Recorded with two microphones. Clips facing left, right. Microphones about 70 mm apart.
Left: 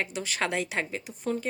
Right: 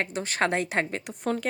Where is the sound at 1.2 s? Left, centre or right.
Right.